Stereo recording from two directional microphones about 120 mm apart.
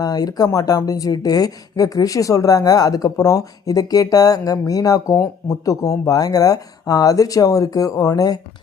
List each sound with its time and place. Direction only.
0.0 s speech: 30° left (ahead or behind)